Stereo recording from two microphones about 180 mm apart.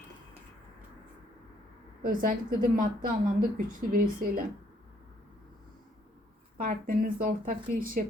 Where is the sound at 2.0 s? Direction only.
50° right (ahead or behind).